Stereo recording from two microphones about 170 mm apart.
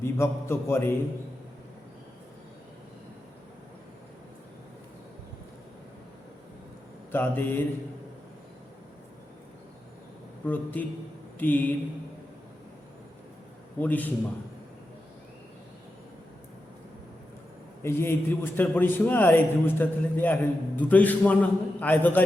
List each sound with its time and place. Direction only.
0.0 s a man's voice: 15° left (ahead or behind)
7.1 s a man's voice: 10° left (ahead or behind)
10.4 s a man's voice: 10° left (ahead or behind)
13.7 s a man's voice: 10° left (ahead or behind)
17.8 s a man's voice: 15° left (ahead or behind)